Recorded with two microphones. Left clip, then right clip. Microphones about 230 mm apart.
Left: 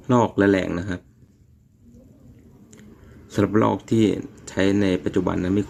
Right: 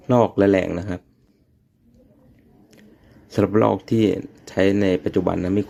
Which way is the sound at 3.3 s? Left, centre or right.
Centre.